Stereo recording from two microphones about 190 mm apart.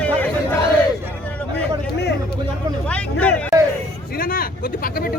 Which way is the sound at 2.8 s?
5° left (ahead or behind).